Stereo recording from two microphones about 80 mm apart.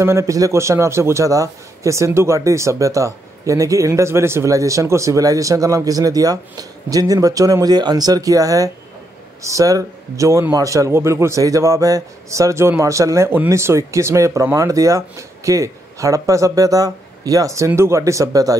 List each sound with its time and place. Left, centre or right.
0.0 s a man's voice: right